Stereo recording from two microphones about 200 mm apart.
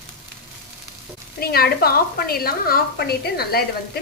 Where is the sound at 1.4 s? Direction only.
50° left (ahead or behind).